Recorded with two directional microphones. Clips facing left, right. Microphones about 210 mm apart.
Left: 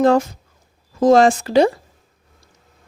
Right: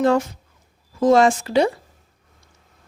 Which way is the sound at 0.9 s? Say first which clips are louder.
Left 3 dB; 40° left (ahead or behind).